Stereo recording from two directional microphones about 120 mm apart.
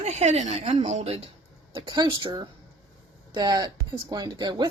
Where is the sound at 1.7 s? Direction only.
40° right (ahead or behind).